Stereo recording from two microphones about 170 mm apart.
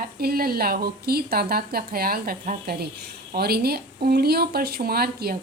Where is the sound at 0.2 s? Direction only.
60° right (ahead or behind).